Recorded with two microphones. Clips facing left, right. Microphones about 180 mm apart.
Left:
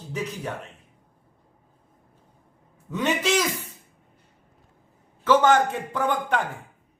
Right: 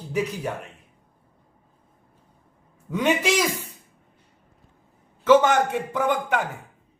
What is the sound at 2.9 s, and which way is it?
Speech, 10° right (ahead or behind).